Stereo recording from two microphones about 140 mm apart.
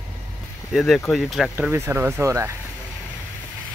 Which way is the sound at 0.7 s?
Centre (ahead or behind).